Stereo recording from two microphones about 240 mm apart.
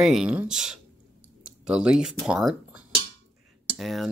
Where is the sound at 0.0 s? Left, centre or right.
Centre.